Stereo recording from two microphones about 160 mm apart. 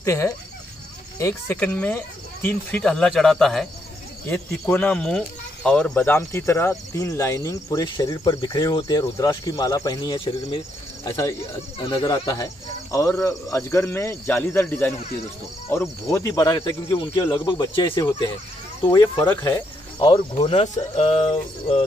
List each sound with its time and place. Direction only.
0.0 s speech: 15° left (ahead or behind)
20.3 s speech: 45° left (ahead or behind)
20.7 s a sound: 40° left (ahead or behind)